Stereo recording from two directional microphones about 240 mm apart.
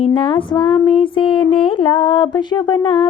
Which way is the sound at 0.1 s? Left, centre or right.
Left.